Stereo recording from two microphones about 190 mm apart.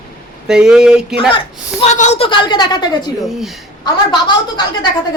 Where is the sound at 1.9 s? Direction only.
40° left (ahead or behind); by 2.9 s 20° left (ahead or behind).